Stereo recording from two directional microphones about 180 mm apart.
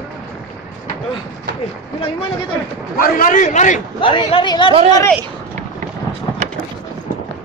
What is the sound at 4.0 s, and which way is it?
Speech, 30° left (ahead or behind).